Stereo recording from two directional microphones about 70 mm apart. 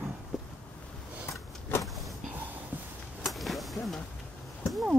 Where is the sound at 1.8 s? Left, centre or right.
Centre.